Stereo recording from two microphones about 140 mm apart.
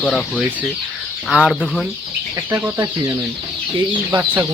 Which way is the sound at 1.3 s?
5° right (ahead or behind).